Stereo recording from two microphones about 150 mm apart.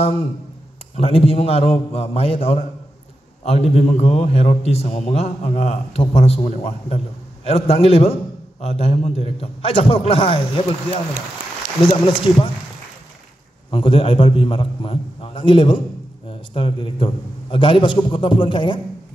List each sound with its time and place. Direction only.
0.0 s a man's voice: 40° left (ahead or behind)
11.9 s a man's voice: 35° left (ahead or behind)
13.7 s a man's voice: 35° left (ahead or behind)